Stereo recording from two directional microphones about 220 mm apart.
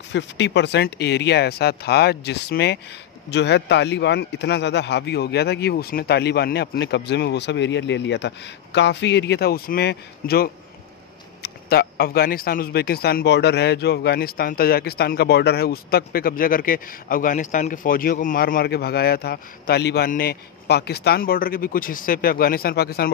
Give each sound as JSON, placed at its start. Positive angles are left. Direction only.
{"t": 0.1, "sound": "speech", "side_deg": 55}